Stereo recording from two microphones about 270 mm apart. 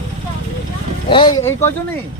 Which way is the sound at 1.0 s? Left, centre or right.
Centre.